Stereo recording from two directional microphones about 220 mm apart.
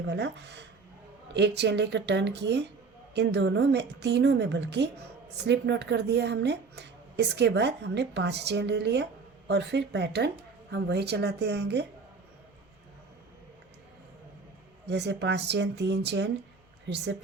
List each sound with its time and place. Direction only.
0.1 s a woman's voice: 50° right (ahead or behind)
14.8 s a woman's voice: 50° right (ahead or behind)